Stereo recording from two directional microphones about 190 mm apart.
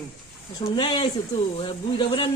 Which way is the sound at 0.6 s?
20° left (ahead or behind).